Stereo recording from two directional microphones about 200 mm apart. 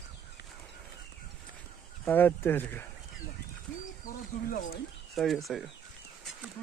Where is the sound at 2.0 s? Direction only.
10° left (ahead or behind).